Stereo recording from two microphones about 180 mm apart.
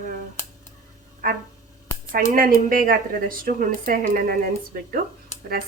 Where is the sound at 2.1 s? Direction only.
50° right (ahead or behind).